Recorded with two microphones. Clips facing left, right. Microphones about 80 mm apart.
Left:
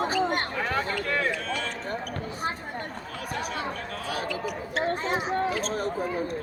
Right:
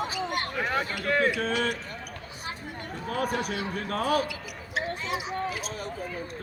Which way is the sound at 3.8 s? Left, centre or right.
Right.